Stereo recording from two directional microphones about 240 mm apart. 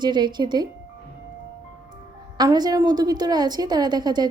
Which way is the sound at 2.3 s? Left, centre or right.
Centre.